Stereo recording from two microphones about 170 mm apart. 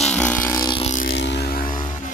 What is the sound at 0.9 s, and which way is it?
Vehicle, 75° left (ahead or behind).